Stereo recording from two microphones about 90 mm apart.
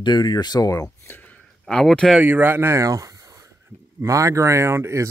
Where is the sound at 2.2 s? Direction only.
20° right (ahead or behind).